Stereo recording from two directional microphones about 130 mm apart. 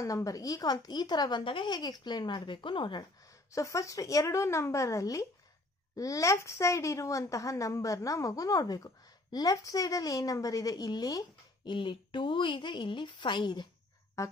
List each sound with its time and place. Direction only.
0.0 s a woman's voice: 25° left (ahead or behind)
3.5 s a woman's voice: 25° left (ahead or behind)
14.2 s a woman's voice: 20° left (ahead or behind)